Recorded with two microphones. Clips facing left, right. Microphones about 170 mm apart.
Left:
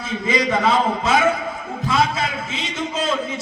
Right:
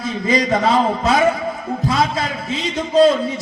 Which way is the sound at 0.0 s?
35° right (ahead or behind).